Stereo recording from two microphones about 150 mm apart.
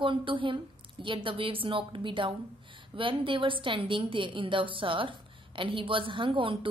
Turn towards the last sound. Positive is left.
turn(degrees=-35)  # may be behind; listen again after turning